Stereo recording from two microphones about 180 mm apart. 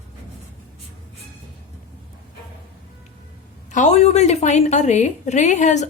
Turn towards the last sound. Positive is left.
turn(degrees=40)  # may be behind; listen again after turning